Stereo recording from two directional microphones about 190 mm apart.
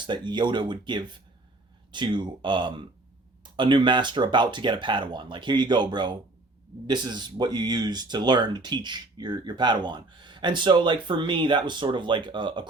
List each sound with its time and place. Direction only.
0.0 s speech: 25° right (ahead or behind)